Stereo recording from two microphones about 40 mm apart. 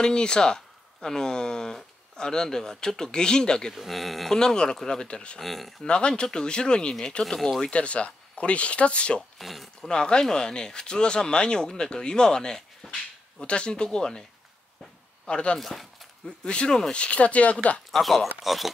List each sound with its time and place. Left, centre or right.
0.0 s speech: centre
3.7 s speech: centre
4.4 s speech: centre
5.4 s speech: centre
5.9 s speech: left
7.6 s speech: left
9.4 s speech: centre
9.8 s speech: left
13.4 s speech: left
15.2 s speech: left
15.6 s speech: centre
16.3 s speech: left
17.9 s speech: centre